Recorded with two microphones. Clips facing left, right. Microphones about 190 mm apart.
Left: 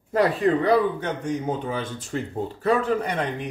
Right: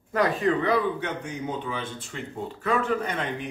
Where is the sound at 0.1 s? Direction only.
35° left (ahead or behind).